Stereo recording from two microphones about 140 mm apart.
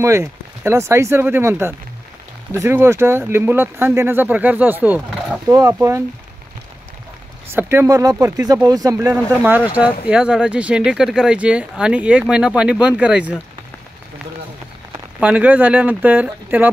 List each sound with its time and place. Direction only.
0.0 s speech: 20° right (ahead or behind)
7.5 s speech: 20° right (ahead or behind)
10.0 s speech: 5° right (ahead or behind)
15.1 s speech: 10° right (ahead or behind)